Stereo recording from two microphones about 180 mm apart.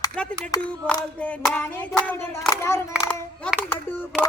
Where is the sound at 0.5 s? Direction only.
20° left (ahead or behind).